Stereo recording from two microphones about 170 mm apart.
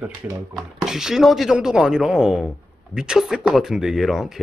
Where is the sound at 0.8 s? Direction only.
5° right (ahead or behind).